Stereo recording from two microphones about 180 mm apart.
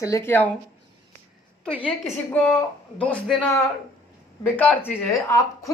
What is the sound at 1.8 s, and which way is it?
Speech, 5° left (ahead or behind).